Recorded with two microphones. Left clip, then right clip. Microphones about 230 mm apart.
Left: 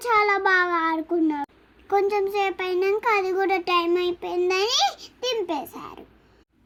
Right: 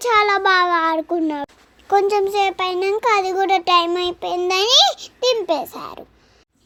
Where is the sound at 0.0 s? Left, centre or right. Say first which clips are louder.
Right 5 dB; right.